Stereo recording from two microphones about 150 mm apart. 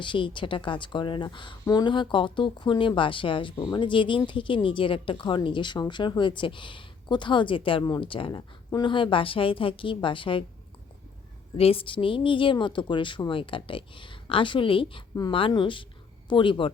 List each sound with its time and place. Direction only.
0.0 s speech: 35° left (ahead or behind)
11.5 s speech: 40° left (ahead or behind)